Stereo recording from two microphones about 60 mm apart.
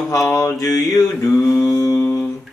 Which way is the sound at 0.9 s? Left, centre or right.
Left.